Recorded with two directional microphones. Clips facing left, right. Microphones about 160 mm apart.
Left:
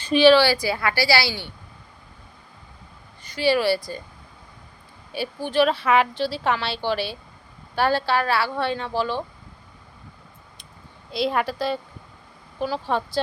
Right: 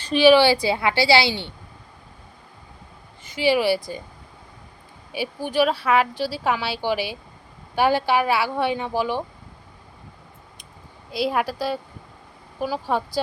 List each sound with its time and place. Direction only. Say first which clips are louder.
0.2 s a woman's voice: right 1 dB; 15° right (ahead or behind)
3.3 s speech: right 1 dB; 15° right (ahead or behind)
5.1 s speech: even; 15° right (ahead or behind)
11.1 s speech: even; 5° right (ahead or behind)